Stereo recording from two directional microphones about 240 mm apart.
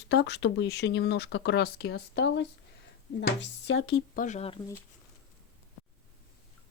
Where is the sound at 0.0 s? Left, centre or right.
Left.